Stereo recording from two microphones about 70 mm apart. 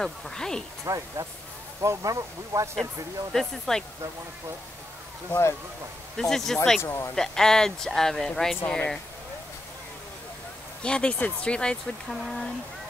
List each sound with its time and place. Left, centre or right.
0.0 s speech: centre
0.8 s speech: right
3.3 s speech: centre
5.3 s speech: left
6.1 s speech: centre
6.8 s speech: left
7.2 s speech: centre
10.8 s speech: centre
12.1 s speech: centre